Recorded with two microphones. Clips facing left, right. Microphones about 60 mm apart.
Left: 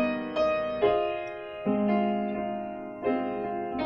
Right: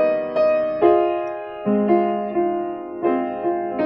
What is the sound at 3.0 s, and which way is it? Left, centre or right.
Music, right.